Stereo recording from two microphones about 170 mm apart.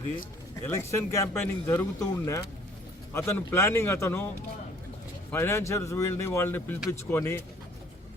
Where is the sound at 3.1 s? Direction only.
15° left (ahead or behind).